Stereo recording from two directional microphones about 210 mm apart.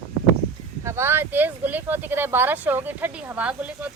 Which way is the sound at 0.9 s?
10° right (ahead or behind).